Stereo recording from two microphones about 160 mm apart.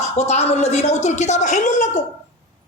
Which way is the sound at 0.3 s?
40° left (ahead or behind).